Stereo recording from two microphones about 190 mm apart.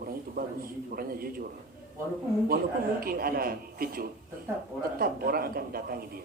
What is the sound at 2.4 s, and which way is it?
A man's voice, 50° right (ahead or behind).